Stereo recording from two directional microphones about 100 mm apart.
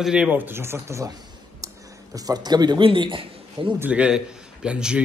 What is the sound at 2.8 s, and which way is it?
Speech, 60° right (ahead or behind).